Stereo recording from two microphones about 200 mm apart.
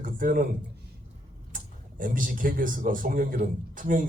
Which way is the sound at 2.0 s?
45° right (ahead or behind).